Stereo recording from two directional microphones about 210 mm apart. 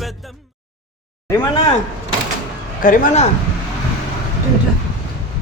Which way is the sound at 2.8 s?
40° left (ahead or behind).